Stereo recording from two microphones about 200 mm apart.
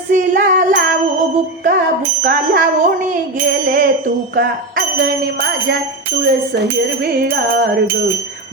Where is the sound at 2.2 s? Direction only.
45° right (ahead or behind).